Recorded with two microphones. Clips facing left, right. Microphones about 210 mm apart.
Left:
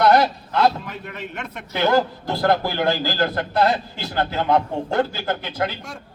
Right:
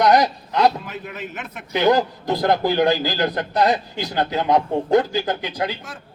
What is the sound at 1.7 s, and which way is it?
A man's voice, 15° right (ahead or behind).